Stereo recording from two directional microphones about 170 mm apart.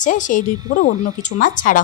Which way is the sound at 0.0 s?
50° left (ahead or behind).